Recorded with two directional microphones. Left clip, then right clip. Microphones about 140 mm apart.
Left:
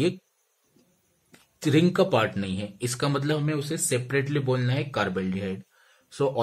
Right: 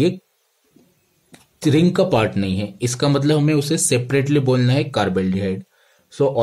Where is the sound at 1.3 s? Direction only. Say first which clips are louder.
Right 6 dB; 20° right (ahead or behind).